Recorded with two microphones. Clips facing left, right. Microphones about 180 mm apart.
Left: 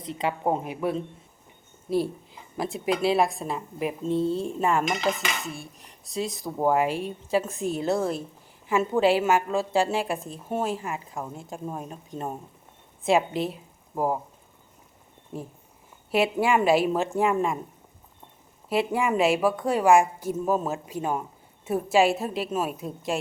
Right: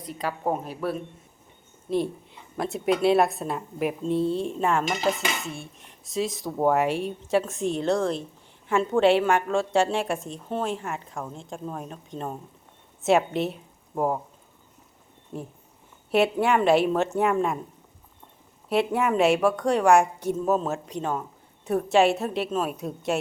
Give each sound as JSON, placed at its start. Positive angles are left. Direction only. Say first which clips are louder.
{"t": 0.0, "sound": "a woman's voice", "louder": "left 2 dB", "side_deg": 25}
{"t": 2.6, "sound": "a woman's voice", "louder": "right 2 dB", "side_deg": 0}
{"t": 16.1, "sound": "a woman's voice", "louder": "right 1 dB", "side_deg": 0}
{"t": 18.7, "sound": "a woman's voice", "louder": "right 1 dB", "side_deg": 0}